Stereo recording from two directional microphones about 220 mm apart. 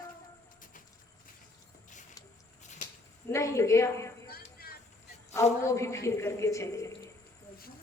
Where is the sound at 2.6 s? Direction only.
35° left (ahead or behind).